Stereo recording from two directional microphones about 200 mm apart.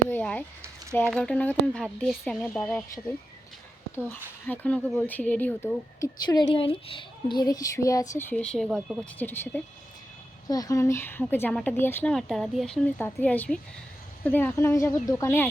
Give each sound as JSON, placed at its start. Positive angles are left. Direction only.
{"t": 0.1, "sound": "speech", "side_deg": 10}
{"t": 4.4, "sound": "speech", "side_deg": 10}